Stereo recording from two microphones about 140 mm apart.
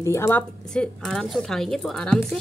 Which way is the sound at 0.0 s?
20° left (ahead or behind).